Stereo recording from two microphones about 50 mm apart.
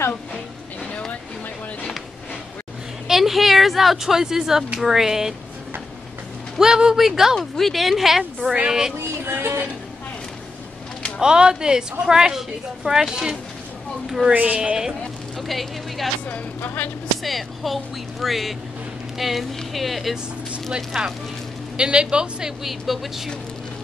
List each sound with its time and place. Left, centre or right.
3.1 s a woman's voice: centre
6.6 s a woman's voice: centre
7.3 s a woman's voice: centre
9.0 s a sound: right
11.1 s a woman's voice: centre
14.0 s a sound: centre
14.3 s a man's voice: right
15.4 s speech: centre
16.3 s speech: left
17.2 s a woman's voice: centre
22.6 s speech: centre